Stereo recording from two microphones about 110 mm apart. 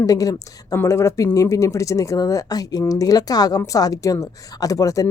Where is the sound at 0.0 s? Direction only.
30° left (ahead or behind).